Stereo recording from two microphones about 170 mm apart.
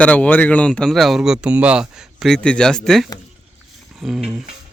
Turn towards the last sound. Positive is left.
turn(degrees=0)  # may be behind; listen again after turning